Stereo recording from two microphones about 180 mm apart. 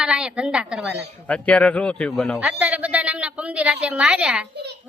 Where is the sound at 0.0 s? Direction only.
5° right (ahead or behind).